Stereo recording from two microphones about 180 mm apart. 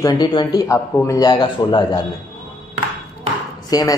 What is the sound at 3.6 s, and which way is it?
Speech, 20° left (ahead or behind).